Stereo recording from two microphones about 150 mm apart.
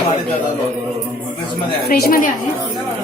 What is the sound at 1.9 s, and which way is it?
Speech, 85° left.